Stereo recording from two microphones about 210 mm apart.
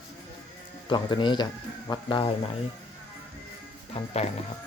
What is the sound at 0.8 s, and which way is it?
Speech, 20° left (ahead or behind).